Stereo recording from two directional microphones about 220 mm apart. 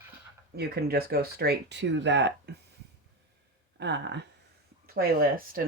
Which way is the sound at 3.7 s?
55° right (ahead or behind).